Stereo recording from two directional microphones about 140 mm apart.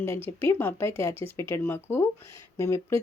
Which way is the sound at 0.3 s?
15° left (ahead or behind).